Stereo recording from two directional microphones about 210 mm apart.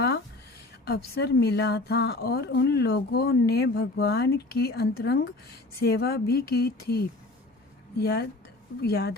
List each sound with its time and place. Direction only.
0.9 s speech: 50° left (ahead or behind)